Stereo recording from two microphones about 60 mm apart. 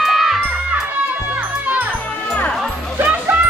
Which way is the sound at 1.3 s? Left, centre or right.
Right.